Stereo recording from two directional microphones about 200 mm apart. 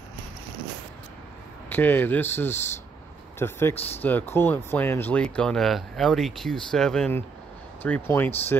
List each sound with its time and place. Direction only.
1.7 s speech: 10° left (ahead or behind)
3.7 s speech: 30° left (ahead or behind)
4.0 s speech: 10° left (ahead or behind)